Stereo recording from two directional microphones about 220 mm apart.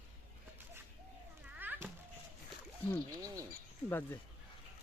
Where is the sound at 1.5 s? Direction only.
10° right (ahead or behind).